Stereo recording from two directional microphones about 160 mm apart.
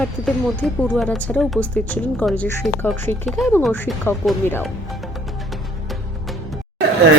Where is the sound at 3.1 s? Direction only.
15° left (ahead or behind).